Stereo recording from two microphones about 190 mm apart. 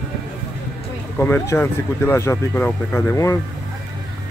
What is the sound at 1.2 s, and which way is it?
Speech, 15° left (ahead or behind).